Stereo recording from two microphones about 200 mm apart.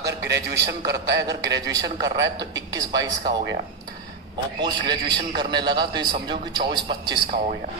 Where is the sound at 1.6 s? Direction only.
15° right (ahead or behind).